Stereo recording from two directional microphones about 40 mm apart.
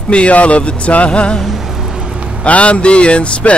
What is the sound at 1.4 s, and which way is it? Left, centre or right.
Music, centre.